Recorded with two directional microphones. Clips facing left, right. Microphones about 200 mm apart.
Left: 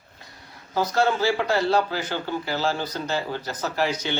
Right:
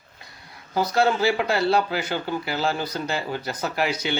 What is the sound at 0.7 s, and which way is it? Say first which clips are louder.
Speech: right 1 dB; 10° right (ahead or behind).